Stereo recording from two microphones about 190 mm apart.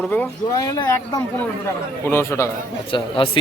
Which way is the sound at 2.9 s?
25° left (ahead or behind).